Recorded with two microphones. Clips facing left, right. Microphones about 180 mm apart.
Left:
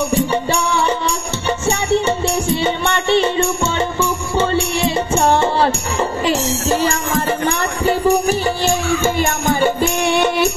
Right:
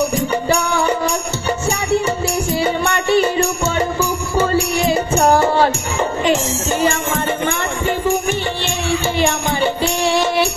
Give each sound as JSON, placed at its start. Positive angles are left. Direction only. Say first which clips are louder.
{"t": 0.1, "sound": "music", "louder": "even", "side_deg": 30}
{"t": 2.5, "sound": "music", "louder": "even", "side_deg": 25}